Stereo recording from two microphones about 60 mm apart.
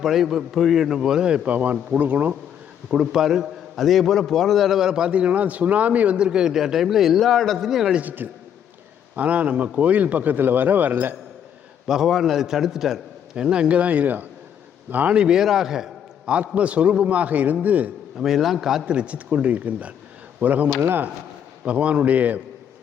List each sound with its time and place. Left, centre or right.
0.0 s a man's voice: centre
1.5 s speech: right
2.9 s a man's voice: centre
7.9 s speech: right
11.9 s a man's voice: centre
13.3 s speech: centre
15.1 s a man's voice: centre
16.4 s speech: right
18.2 s a man's voice: centre
18.9 s speech: centre